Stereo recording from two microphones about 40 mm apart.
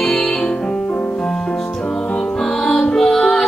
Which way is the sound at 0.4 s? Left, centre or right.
Left.